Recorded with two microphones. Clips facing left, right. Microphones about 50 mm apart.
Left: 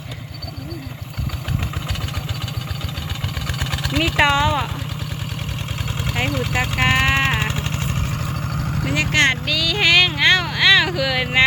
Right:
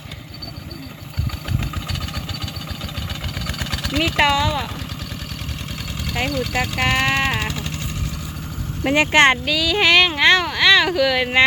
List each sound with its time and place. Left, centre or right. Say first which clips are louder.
3.4 s vehicle: left 1 dB; centre
4.3 s speech: left 1 dB; centre
6.1 s vehicle: even; left
8.9 s speech: right 4 dB; right
9.5 s speech: right 1 dB; centre